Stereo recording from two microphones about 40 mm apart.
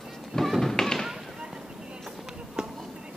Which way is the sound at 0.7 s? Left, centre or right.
Centre.